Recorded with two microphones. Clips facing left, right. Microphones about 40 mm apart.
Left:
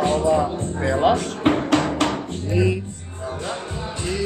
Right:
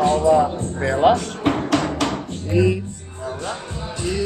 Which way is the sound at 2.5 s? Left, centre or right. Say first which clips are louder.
Right 3 dB; centre.